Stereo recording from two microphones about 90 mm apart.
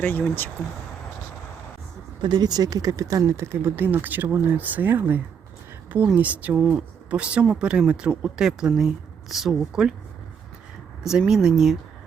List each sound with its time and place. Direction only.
0.0 s speech: 20° left (ahead or behind)
2.2 s speech: 55° right (ahead or behind); by 9.9 s 5° right (ahead or behind)
11.0 s speech: 5° right (ahead or behind)